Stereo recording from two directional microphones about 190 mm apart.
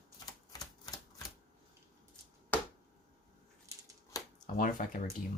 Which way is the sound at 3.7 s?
15° right (ahead or behind).